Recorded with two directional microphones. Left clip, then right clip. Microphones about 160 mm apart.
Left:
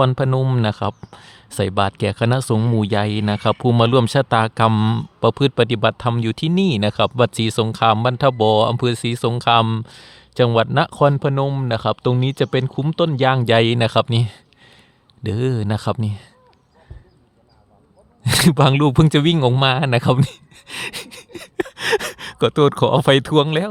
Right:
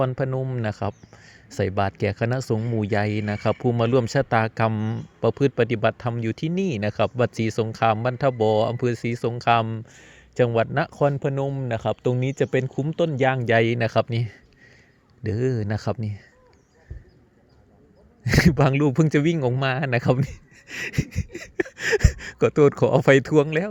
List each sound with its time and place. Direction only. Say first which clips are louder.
0.2 s speech: left 6 dB; 25° left (ahead or behind)
4.7 s speech: left 9 dB; 45° left (ahead or behind)
5.2 s speech: left 4 dB; 25° left (ahead or behind)
18.2 s speech: left 4 dB; 25° left (ahead or behind)
20.2 s a sound: left 7 dB; 20° left (ahead or behind)
21.6 s speech: left 3 dB; 15° left (ahead or behind)